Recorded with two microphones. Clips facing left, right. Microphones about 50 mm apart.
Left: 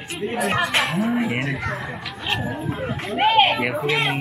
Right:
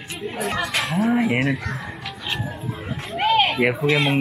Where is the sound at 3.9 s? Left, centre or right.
Centre.